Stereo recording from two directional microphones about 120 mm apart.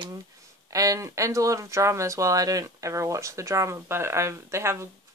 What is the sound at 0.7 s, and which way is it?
Speech, 30° right (ahead or behind).